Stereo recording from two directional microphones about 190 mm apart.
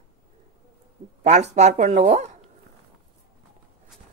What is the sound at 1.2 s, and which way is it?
Speech, 35° right (ahead or behind).